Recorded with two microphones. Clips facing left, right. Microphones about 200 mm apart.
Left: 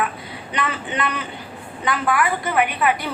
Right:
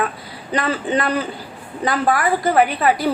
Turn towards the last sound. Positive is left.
turn(degrees=-35)  # may be behind; listen again after turning